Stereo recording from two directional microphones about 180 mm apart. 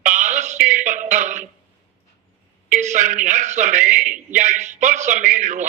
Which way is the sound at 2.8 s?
40° right (ahead or behind).